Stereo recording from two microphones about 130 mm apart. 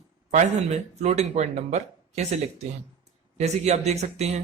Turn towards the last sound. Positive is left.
turn(degrees=-60)  # may be behind; listen again after turning